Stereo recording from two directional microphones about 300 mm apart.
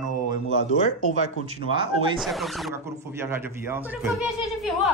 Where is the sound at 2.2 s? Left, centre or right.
Centre.